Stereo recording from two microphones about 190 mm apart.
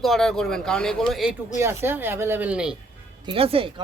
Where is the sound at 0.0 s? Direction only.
Centre (ahead or behind).